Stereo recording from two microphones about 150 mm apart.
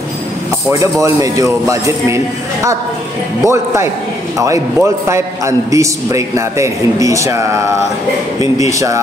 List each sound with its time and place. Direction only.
0.7 s a man's voice: 20° right (ahead or behind)